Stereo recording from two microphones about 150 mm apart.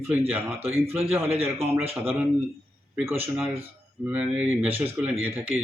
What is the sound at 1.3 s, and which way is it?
Speech, 40° right (ahead or behind).